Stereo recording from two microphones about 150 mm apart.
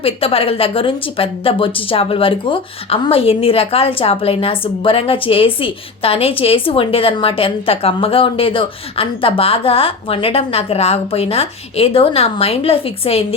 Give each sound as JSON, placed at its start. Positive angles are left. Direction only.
{"t": 0.0, "sound": "a woman's voice", "side_deg": 40}